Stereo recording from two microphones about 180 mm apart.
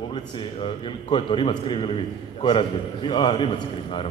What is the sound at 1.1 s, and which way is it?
A man's voice, 25° left (ahead or behind).